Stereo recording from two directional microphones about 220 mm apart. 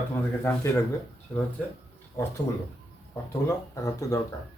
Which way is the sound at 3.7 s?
15° left (ahead or behind).